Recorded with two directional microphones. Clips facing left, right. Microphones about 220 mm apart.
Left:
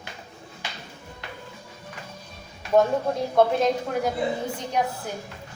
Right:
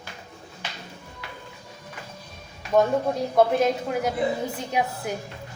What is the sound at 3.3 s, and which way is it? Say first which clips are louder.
Speech: even; 5° right (ahead or behind).